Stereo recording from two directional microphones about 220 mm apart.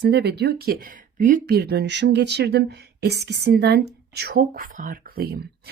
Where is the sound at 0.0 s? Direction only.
50° right (ahead or behind).